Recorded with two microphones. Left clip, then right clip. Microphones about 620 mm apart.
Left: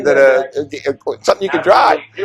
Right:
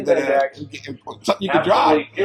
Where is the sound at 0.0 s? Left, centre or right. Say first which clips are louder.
Left 7 dB; left.